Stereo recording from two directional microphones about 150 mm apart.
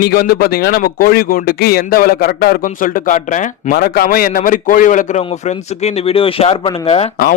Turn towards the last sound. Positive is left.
turn(degrees=40)  # may be behind; listen again after turning